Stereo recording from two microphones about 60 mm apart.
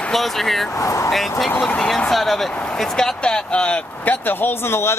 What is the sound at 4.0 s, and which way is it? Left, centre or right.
Speech, left.